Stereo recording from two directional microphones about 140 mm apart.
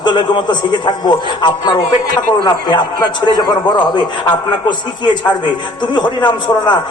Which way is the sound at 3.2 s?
30° left (ahead or behind).